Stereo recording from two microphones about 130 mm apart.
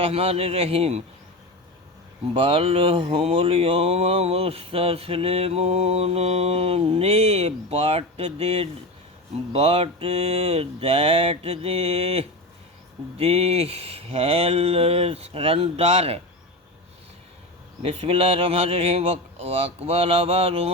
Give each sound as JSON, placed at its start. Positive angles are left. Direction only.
{"t": 0.0, "sound": "speech", "side_deg": -50}
{"t": 2.3, "sound": "speech", "side_deg": -45}
{"t": 17.8, "sound": "speech", "side_deg": -45}